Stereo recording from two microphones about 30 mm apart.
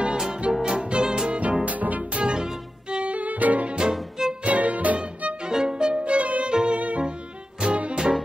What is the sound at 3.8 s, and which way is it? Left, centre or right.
Music, right.